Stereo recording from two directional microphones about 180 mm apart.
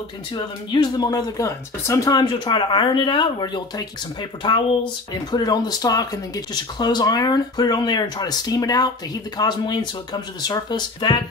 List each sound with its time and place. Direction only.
0.3 s speech: 25° left (ahead or behind)